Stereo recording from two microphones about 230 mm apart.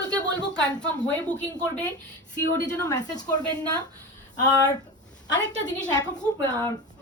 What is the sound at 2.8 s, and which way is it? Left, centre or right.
Speech, centre.